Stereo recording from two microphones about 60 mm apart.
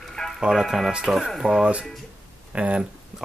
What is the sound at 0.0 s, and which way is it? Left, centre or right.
Music, centre.